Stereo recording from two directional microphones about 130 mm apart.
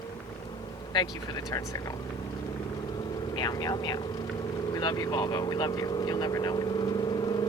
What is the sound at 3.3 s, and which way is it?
Speech, 30° left (ahead or behind).